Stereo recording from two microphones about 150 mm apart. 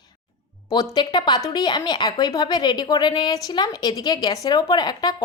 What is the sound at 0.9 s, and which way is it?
Speech, 30° left (ahead or behind).